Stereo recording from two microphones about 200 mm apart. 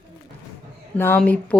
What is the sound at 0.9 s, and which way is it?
Speech, 10° left (ahead or behind).